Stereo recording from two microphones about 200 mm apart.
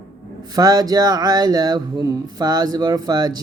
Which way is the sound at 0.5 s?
20° right (ahead or behind).